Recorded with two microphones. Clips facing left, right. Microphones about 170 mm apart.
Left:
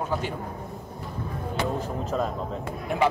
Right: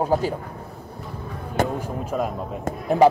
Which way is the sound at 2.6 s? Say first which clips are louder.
Right 9 dB; 40° right (ahead or behind).